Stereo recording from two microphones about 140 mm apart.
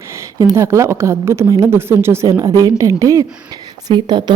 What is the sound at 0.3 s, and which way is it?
A woman's voice, 25° right (ahead or behind).